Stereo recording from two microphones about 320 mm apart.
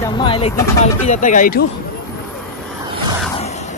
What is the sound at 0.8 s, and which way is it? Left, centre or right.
Speech, left.